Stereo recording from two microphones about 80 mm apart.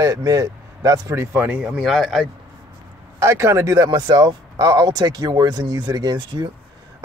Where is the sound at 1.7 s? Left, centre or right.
Centre.